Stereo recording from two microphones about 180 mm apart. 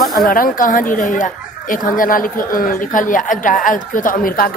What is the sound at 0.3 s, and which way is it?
A woman's voice, 50° left (ahead or behind).